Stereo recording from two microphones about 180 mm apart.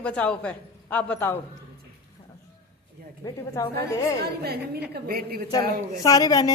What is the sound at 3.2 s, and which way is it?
Speech, 20° left (ahead or behind).